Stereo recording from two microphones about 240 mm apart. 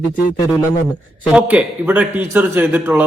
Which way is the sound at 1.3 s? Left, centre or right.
Centre.